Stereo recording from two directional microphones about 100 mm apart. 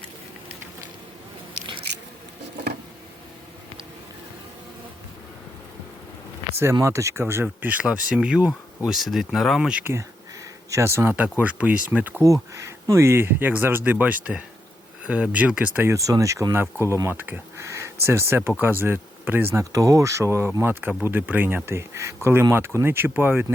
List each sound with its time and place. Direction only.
6.8 s speech: 30° right (ahead or behind)
7.6 s speech: 15° right (ahead or behind)
9.8 s speech: 25° right (ahead or behind)
11.1 s speech: 15° right (ahead or behind)
12.2 s speech: 30° right (ahead or behind); by 15.9 s 15° right (ahead or behind)
15.9 s speech: 35° right (ahead or behind); by 17.7 s 20° right (ahead or behind)
17.7 s a sound: 25° right (ahead or behind)
18.0 s speech: 25° right (ahead or behind)
19.7 s speech: 30° right (ahead or behind)